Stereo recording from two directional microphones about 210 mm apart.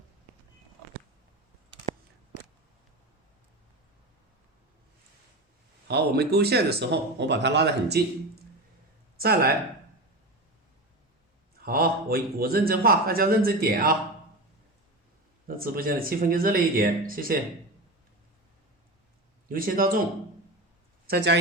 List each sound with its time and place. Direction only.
5.9 s a man's voice: 50° right (ahead or behind)
9.1 s speech: 45° right (ahead or behind)
11.6 s a man's voice: 45° right (ahead or behind)
15.4 s a man's voice: 45° right (ahead or behind)
19.5 s a man's voice: 40° right (ahead or behind)